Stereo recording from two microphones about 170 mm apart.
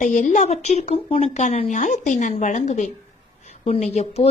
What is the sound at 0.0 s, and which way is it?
A woman's voice, 45° left (ahead or behind).